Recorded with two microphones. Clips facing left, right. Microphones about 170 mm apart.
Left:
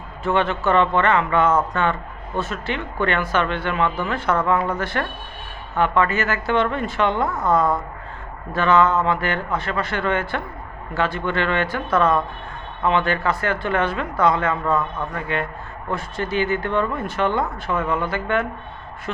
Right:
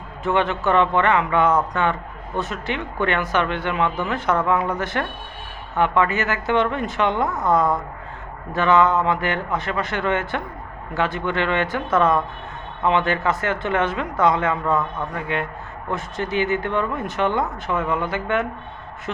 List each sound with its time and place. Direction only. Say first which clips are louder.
0.3 s speech: even; 15° right (ahead or behind)